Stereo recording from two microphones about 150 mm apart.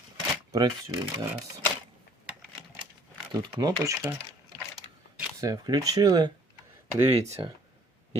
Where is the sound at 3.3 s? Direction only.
25° right (ahead or behind).